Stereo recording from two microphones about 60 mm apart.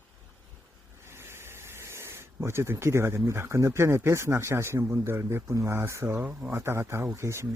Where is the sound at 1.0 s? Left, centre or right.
Right.